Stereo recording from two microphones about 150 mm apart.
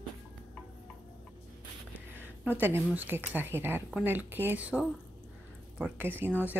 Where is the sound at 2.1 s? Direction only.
10° right (ahead or behind).